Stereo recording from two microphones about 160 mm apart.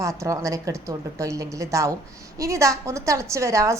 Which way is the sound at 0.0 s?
20° right (ahead or behind).